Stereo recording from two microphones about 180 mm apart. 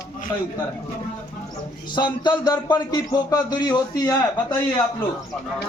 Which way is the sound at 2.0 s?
25° left (ahead or behind).